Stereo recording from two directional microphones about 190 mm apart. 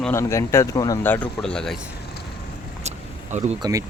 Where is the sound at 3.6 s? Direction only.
15° right (ahead or behind).